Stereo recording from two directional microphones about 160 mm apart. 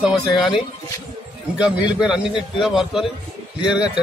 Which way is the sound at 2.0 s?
5° right (ahead or behind).